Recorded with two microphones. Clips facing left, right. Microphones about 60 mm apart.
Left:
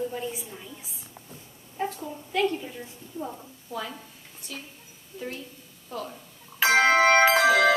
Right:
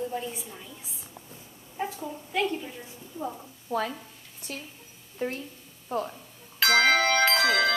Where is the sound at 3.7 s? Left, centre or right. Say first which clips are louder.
Right 5 dB; right.